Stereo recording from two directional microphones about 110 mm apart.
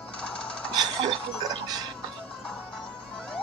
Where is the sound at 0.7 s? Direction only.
40° right (ahead or behind).